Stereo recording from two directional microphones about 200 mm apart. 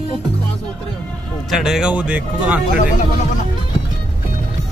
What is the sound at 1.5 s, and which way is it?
Speech, 5° right (ahead or behind).